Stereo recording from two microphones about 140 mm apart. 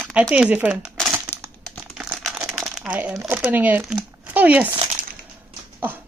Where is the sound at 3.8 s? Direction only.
5° right (ahead or behind).